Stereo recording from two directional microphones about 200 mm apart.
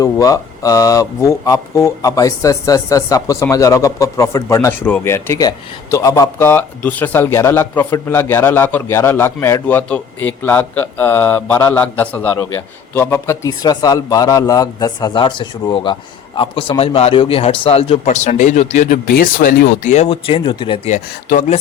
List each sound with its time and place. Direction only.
0.0 s speech: 15° left (ahead or behind); by 18.9 s 35° left (ahead or behind)
19.0 s speech: 50° left (ahead or behind)